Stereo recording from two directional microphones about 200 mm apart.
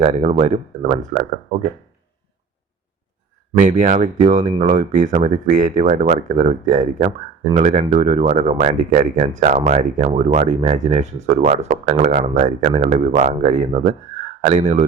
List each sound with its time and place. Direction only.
0.0 s speech: 35° right (ahead or behind)
3.6 s speech: 40° right (ahead or behind)